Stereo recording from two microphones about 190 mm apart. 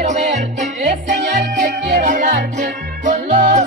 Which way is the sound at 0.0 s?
45° right (ahead or behind).